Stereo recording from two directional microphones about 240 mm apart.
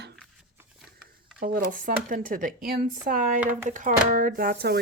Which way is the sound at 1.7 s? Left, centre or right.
Right.